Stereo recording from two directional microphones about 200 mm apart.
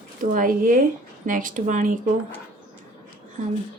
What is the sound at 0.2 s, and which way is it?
A woman's voice, 45° right (ahead or behind).